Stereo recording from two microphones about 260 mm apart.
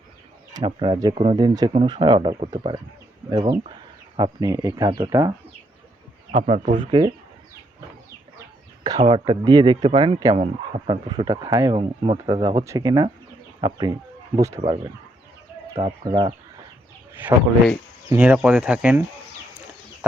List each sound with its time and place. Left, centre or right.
0.5 s speech: centre
6.3 s speech: right
9.0 s speech: right
17.2 s speech: centre